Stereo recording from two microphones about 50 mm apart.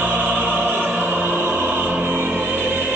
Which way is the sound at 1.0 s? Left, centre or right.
Right.